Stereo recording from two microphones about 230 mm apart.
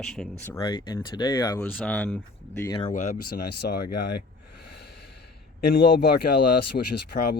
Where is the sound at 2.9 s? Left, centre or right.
Left.